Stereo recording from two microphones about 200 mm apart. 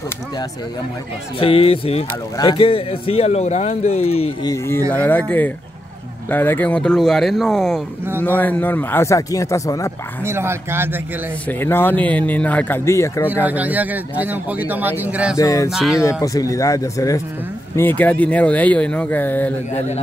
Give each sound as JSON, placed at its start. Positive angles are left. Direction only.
{"t": 1.4, "sound": "speech", "side_deg": 30}
{"t": 4.5, "sound": "speech", "side_deg": 10}
{"t": 10.2, "sound": "a man's voice", "side_deg": -10}
{"t": 11.4, "sound": "speech", "side_deg": 10}
{"t": 13.3, "sound": "a man's voice", "side_deg": -10}
{"t": 15.3, "sound": "speech", "side_deg": 15}
{"t": 15.7, "sound": "speech", "side_deg": 0}
{"t": 16.0, "sound": "speech", "side_deg": 15}